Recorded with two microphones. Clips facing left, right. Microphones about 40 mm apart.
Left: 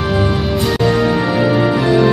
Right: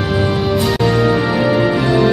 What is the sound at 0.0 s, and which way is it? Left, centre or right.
Music, centre.